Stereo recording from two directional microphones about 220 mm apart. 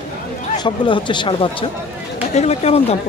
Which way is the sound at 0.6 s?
20° left (ahead or behind).